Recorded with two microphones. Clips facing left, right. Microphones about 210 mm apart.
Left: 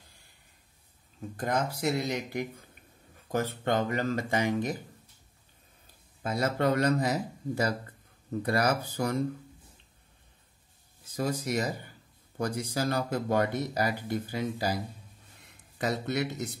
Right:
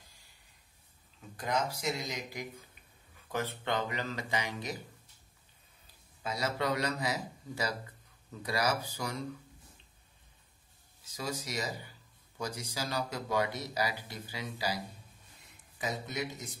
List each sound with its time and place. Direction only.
1.3 s speech: 50° left (ahead or behind)
3.3 s speech: 45° left (ahead or behind)
6.2 s speech: 55° left (ahead or behind)
11.1 s speech: 55° left (ahead or behind)
15.8 s speech: 70° left (ahead or behind)